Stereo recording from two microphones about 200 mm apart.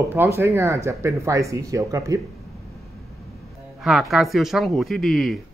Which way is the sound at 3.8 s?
Centre (ahead or behind).